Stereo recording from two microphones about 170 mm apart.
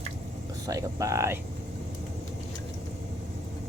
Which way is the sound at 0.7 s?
20° right (ahead or behind).